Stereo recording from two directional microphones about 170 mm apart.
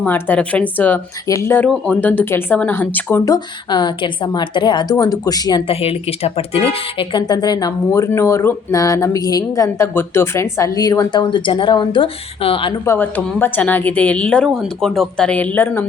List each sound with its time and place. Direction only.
0.0 s speech: 10° left (ahead or behind)
5.8 s speech: 35° left (ahead or behind)
12.8 s speech: 15° left (ahead or behind)